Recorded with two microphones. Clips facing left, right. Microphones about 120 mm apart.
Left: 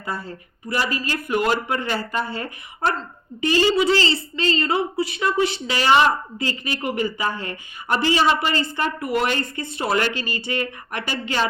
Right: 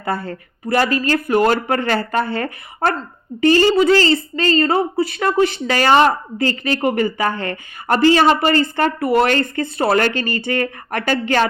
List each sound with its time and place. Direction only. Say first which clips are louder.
0.0 s speech: right 7 dB; 60° right (ahead or behind)
3.8 s a woman's voice: right 6 dB; 50° right (ahead or behind)
9.0 s a woman's voice: right 9 dB; 35° right (ahead or behind)
9.3 s a woman's voice: right 7 dB; 50° right (ahead or behind)